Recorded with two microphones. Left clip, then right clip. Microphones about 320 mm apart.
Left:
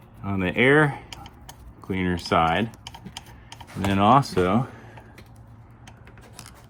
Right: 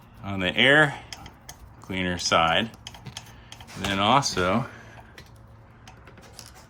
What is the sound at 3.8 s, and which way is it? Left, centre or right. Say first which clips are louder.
Speech: left 3 dB; centre.